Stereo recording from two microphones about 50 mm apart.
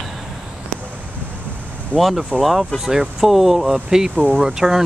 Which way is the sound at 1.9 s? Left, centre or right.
Left.